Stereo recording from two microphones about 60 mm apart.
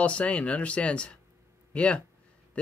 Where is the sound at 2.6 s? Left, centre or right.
Left.